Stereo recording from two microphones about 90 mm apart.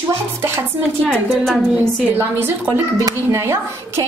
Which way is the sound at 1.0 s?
5° left (ahead or behind).